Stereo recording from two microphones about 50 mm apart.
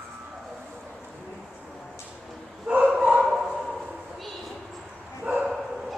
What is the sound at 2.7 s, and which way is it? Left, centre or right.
Bow-wow, right.